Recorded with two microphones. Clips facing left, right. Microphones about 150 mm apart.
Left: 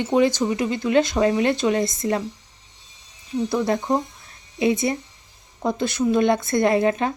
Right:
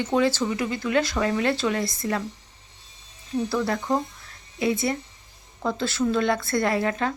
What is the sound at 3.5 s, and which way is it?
Speech, 20° left (ahead or behind).